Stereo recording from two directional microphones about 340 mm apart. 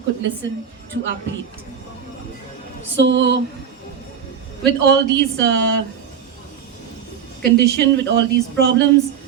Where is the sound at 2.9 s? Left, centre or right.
Right.